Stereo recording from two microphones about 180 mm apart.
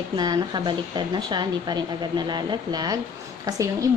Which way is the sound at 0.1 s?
20° right (ahead or behind).